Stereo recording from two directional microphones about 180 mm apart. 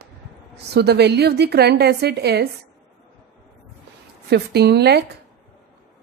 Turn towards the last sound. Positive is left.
turn(degrees=-65)  # may be behind; listen again after turning